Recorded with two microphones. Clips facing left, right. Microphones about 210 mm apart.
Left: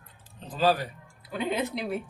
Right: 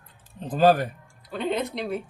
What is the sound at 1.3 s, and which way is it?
Speech, centre (ahead or behind).